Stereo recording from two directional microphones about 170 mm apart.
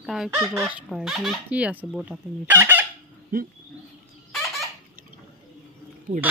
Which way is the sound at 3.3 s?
60° right (ahead or behind).